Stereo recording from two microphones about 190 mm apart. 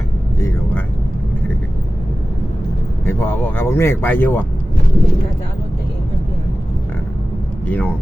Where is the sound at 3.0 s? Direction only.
10° left (ahead or behind).